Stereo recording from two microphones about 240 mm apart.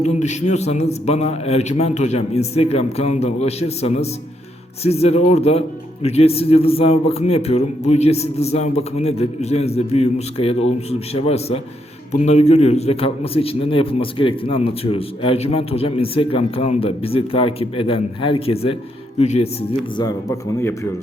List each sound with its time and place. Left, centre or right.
0.0 s a man's voice: left
20.0 s speech: centre